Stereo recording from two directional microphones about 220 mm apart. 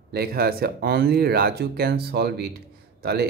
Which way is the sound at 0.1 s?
45° right (ahead or behind).